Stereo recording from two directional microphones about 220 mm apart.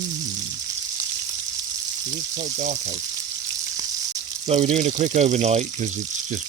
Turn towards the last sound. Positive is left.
turn(degrees=-30)  # may be behind; listen again after turning